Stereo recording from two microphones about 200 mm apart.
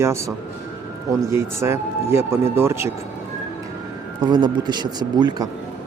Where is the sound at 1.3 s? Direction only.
15° right (ahead or behind).